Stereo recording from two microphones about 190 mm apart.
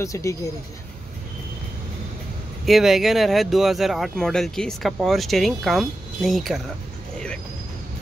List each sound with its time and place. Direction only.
0.0 s speech: 15° left (ahead or behind)
2.6 s speech: centre (ahead or behind)